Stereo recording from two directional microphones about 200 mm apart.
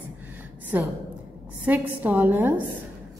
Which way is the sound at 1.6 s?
10° right (ahead or behind).